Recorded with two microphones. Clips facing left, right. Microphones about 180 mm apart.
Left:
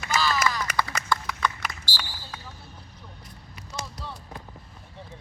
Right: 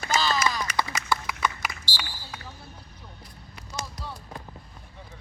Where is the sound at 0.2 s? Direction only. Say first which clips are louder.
Left 2 dB; 20° right (ahead or behind).